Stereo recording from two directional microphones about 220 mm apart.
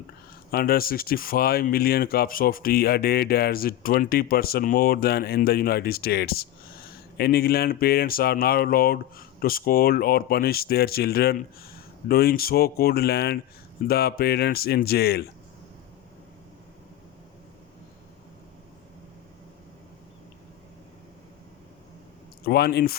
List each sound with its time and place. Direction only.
0.5 s speech: 45° left (ahead or behind)
22.4 s speech: 45° left (ahead or behind)